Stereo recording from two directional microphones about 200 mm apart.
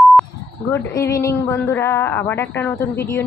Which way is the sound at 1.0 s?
15° left (ahead or behind).